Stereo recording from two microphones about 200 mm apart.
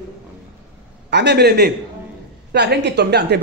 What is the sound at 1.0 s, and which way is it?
Speech, 60° right (ahead or behind).